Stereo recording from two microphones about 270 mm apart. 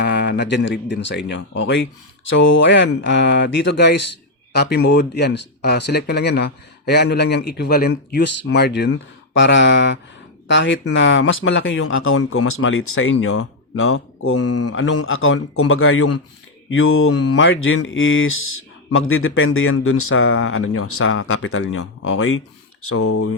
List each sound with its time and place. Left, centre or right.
0.0 s speech: left
14.7 s speech: left
17.3 s speech: left